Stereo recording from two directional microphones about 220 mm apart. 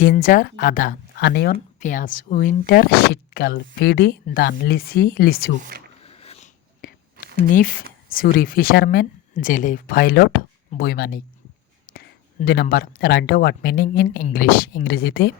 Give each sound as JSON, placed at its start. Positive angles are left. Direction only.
{"t": 0.0, "sound": "speech", "side_deg": 40}
{"t": 6.0, "sound": "a sound", "side_deg": 25}
{"t": 7.5, "sound": "speech", "side_deg": 40}